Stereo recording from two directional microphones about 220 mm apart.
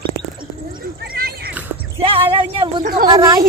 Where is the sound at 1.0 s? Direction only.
45° right (ahead or behind).